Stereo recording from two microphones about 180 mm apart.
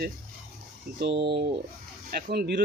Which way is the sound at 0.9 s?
70° right (ahead or behind).